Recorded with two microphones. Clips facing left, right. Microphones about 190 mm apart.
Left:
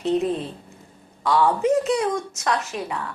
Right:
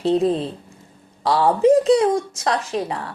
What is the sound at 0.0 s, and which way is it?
Speech, 30° right (ahead or behind).